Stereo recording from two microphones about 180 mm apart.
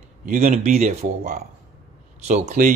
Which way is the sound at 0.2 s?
45° right (ahead or behind).